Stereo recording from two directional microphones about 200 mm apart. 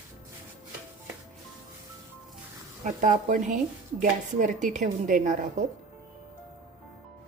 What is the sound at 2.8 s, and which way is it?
A woman's voice, 40° right (ahead or behind).